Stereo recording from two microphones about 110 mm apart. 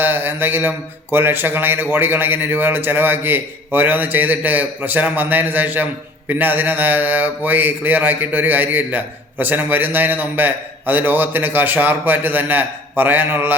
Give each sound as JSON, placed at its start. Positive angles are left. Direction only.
{"t": 0.0, "sound": "mantra", "side_deg": -20}
{"t": 1.1, "sound": "a man's voice", "side_deg": -20}